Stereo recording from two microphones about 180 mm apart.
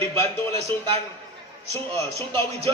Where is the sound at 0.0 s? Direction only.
15° left (ahead or behind).